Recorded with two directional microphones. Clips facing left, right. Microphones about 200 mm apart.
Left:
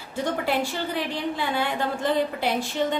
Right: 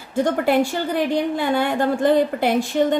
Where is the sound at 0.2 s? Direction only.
50° right (ahead or behind).